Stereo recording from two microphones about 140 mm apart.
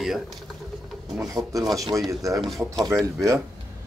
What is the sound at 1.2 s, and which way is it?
Speech, 25° right (ahead or behind).